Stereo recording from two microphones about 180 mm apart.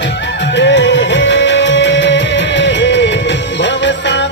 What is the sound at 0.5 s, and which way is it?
Music, 85° left.